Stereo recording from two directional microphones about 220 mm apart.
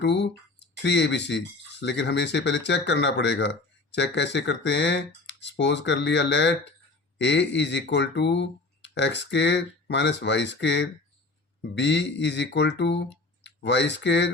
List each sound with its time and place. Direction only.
0.0 s speech: 50° left (ahead or behind)